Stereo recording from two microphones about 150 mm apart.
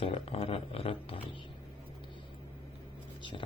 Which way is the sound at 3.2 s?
35° left (ahead or behind).